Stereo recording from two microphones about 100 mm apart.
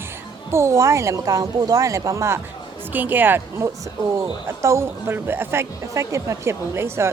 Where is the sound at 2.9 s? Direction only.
20° right (ahead or behind).